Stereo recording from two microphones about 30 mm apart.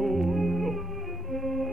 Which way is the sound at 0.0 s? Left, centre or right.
Centre.